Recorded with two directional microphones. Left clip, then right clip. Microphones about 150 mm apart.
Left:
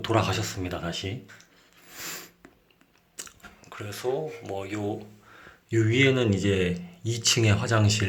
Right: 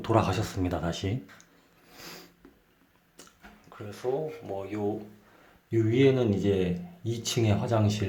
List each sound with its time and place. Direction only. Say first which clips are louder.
0.0 s speech: left 1 dB; 15° right (ahead or behind)
1.9 s a sound: left 7 dB; centre (ahead or behind)
3.7 s speech: left 2 dB; 5° left (ahead or behind)